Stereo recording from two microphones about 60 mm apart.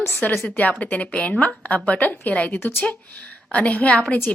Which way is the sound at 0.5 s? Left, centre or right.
Left.